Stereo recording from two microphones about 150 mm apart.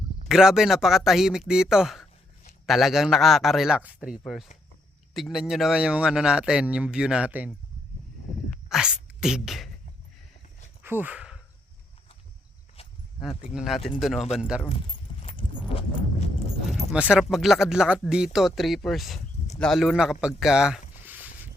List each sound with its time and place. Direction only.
0.3 s speech: 5° right (ahead or behind)
8.7 s speech: 5° right (ahead or behind)
10.8 s speech: 10° right (ahead or behind)
13.5 s speech: 5° right (ahead or behind)
15.2 s horse: 40° left (ahead or behind)
16.7 s speech: 5° right (ahead or behind)
21.0 s a sound: 10° right (ahead or behind)